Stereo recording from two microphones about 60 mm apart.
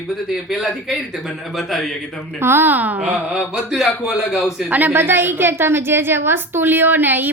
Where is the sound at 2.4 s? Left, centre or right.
Right.